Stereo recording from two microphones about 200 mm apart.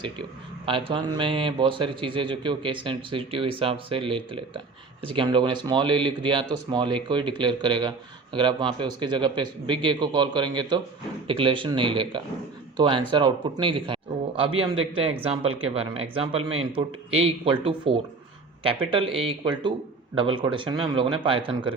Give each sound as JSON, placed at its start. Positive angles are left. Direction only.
{"t": 0.6, "sound": "speech", "side_deg": -25}